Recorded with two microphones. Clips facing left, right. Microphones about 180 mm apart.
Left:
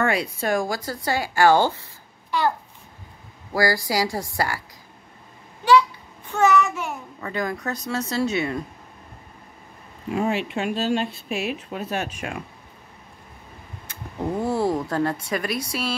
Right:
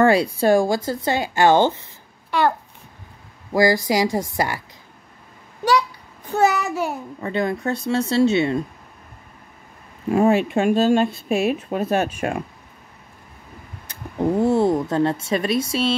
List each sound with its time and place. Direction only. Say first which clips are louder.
0.0 s speech: right 7 dB; 30° right (ahead or behind)
3.5 s speech: right 5 dB; 20° right (ahead or behind)
5.7 s a child's voice: left 2 dB; 40° right (ahead or behind)
10.1 s speech: right 7 dB; 45° right (ahead or behind)
14.4 s speech: right 4 dB; 20° right (ahead or behind)